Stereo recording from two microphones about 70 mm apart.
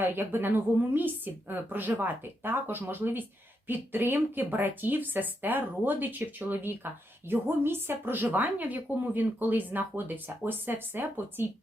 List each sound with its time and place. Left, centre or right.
0.0 s speech: right